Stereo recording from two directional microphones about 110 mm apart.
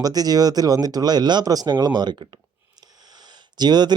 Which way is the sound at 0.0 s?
35° right (ahead or behind).